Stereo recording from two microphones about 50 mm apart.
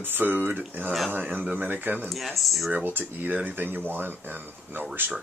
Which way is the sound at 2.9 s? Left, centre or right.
Right.